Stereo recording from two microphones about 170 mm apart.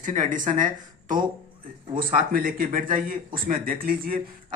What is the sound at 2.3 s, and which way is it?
Speech, 55° right (ahead or behind).